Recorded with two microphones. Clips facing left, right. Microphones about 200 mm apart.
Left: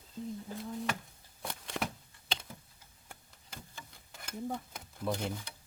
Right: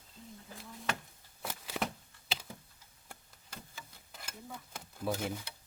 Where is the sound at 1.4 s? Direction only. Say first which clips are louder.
Even; 5° right (ahead or behind).